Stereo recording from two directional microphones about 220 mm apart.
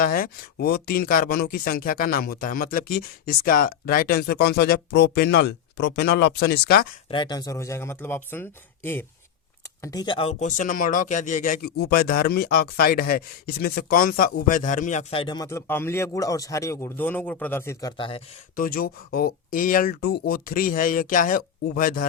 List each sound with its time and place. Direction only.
0.0 s speech: 40° left (ahead or behind)
7.1 s speech: 20° left (ahead or behind)
18.5 s speech: 40° left (ahead or behind)